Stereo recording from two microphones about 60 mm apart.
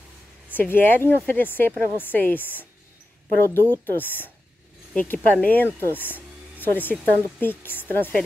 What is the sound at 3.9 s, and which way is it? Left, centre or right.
Speech, left.